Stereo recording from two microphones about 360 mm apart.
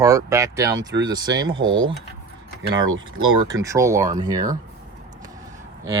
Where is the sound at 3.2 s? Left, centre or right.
Centre.